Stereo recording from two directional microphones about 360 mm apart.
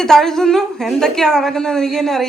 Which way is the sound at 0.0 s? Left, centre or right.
Centre.